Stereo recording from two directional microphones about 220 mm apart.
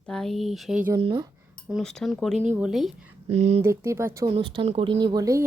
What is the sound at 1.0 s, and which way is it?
Speech, 20° right (ahead or behind).